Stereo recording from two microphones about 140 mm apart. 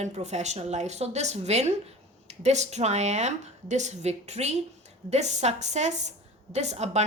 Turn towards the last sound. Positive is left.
turn(degrees=-50)  # may be behind; listen again after turning